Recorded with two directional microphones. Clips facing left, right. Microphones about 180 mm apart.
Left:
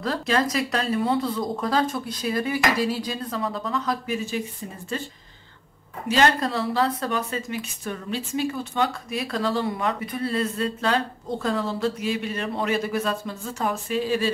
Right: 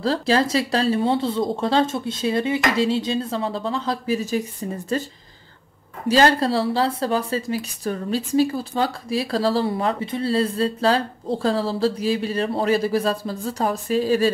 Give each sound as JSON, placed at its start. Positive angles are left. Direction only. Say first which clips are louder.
{"t": 0.0, "sound": "speech", "louder": "right 4 dB", "side_deg": -30}